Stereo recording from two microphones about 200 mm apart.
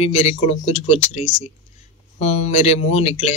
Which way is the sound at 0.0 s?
30° left (ahead or behind).